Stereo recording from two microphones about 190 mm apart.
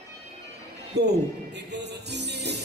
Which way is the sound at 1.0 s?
60° right (ahead or behind).